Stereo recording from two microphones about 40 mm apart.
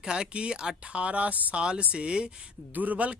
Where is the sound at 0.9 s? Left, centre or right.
Right.